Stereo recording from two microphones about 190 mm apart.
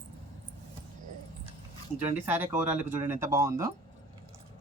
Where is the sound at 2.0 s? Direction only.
10° right (ahead or behind).